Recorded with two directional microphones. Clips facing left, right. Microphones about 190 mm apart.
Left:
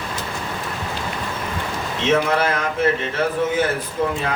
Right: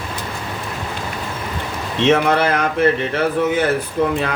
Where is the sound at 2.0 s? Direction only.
65° right (ahead or behind).